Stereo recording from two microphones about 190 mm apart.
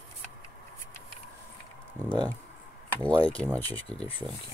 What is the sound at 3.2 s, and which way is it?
Speech, 10° left (ahead or behind).